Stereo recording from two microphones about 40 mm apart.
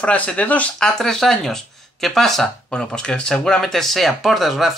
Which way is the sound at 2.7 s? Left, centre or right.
Left.